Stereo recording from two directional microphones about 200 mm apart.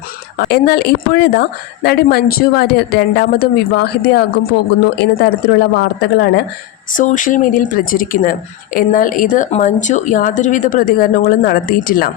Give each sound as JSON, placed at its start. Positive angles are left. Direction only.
{"t": 0.3, "sound": "a woman's voice", "side_deg": 50}
{"t": 6.9, "sound": "speech", "side_deg": 40}